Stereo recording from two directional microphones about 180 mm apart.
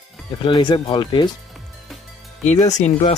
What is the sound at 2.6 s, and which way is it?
Speech, 40° left (ahead or behind).